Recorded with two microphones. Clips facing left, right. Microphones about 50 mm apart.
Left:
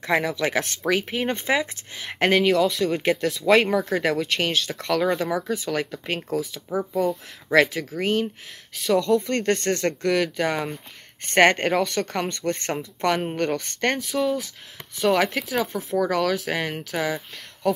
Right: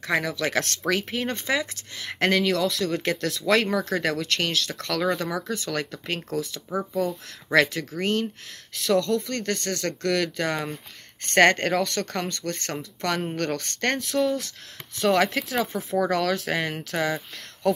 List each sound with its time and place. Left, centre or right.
0.0 s speech: centre
9.3 s speech: left
10.0 s speech: centre
12.3 s speech: left; by 17.8 s centre